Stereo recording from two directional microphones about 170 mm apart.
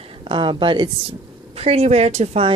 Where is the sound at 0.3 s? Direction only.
30° right (ahead or behind).